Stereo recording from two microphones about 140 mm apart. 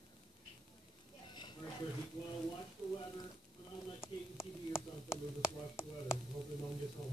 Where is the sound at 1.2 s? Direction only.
35° left (ahead or behind).